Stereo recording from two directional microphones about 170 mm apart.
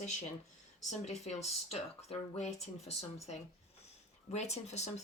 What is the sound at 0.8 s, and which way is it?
Speech, 40° left (ahead or behind).